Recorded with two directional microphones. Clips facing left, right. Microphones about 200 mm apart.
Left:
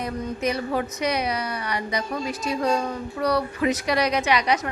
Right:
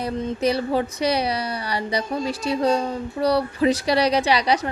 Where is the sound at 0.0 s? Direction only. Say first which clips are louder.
Right 4 dB; 35° right (ahead or behind).